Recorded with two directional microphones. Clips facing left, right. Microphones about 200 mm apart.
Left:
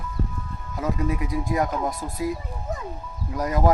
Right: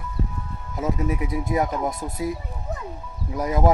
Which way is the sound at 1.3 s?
20° right (ahead or behind).